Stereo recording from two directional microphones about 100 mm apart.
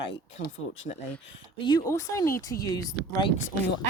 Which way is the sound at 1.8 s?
30° left (ahead or behind).